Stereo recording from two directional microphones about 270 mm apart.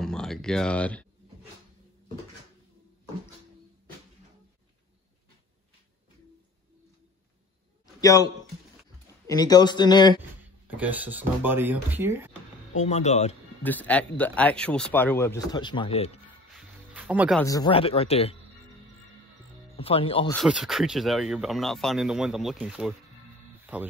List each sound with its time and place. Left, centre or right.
0.0 s speech: centre
7.8 s a sound: centre
9.3 s speech: centre
10.4 s speech: centre
12.7 s speech: left
13.7 s speech: centre
16.3 s music: centre
17.4 s speech: centre
19.8 s speech: left
20.3 s speech: centre